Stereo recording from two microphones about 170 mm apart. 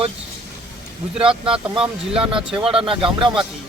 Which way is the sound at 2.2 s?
30° right (ahead or behind).